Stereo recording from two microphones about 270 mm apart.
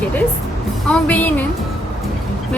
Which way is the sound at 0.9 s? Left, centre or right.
Centre.